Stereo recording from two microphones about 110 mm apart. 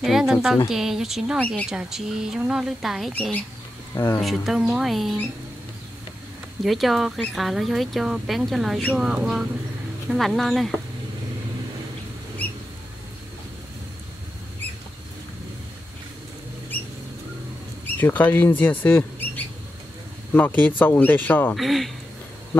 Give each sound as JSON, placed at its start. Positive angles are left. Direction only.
{"t": 0.0, "sound": "speech", "side_deg": -5}
{"t": 1.4, "sound": "speech", "side_deg": 10}
{"t": 1.7, "sound": "speech", "side_deg": -5}
{"t": 3.1, "sound": "speech", "side_deg": 15}
{"t": 3.9, "sound": "speech", "side_deg": 25}
{"t": 4.2, "sound": "speech", "side_deg": 0}
{"t": 6.6, "sound": "speech", "side_deg": 0}
{"t": 17.8, "sound": "speech", "side_deg": 15}
{"t": 21.5, "sound": "speech", "side_deg": 0}